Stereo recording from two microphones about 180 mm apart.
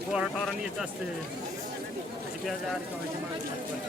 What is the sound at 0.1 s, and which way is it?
Speech, 5° right (ahead or behind).